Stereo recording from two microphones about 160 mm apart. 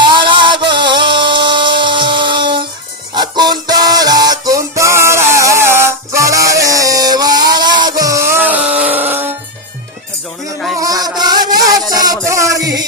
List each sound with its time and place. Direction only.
0.0 s music: 30° right (ahead or behind); by 9.3 s 10° right (ahead or behind)
10.8 s music: 20° right (ahead or behind)